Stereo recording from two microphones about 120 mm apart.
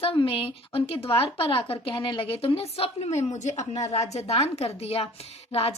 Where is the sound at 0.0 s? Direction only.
50° left (ahead or behind).